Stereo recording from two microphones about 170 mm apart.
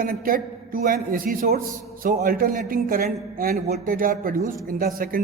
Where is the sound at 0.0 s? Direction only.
55° right (ahead or behind).